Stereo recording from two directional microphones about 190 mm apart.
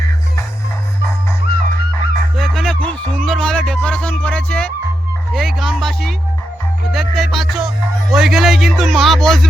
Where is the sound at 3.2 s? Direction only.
5° left (ahead or behind).